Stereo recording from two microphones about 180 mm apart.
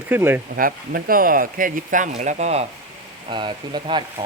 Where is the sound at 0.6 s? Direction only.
50° right (ahead or behind).